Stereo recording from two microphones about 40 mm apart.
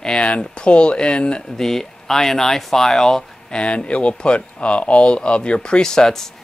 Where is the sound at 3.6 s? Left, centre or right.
Left.